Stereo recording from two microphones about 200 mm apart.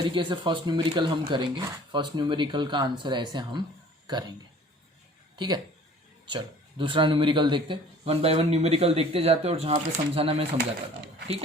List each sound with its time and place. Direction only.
0.1 s speech: 25° right (ahead or behind)
6.2 s speech: 25° right (ahead or behind)